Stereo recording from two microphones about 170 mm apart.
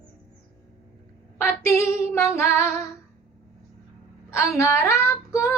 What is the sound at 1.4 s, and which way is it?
Female singing, 15° left (ahead or behind).